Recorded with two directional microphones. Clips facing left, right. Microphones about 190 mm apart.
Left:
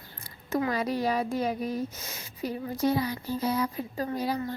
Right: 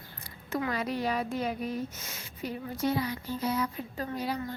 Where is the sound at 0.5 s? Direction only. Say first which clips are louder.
Left 3 dB; 35° left (ahead or behind).